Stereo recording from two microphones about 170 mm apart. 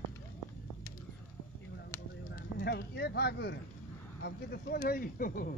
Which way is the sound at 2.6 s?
75° left (ahead or behind).